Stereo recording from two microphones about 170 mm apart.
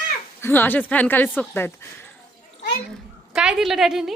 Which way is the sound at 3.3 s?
5° right (ahead or behind).